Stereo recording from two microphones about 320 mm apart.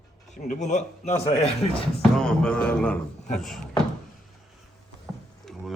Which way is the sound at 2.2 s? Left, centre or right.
Centre.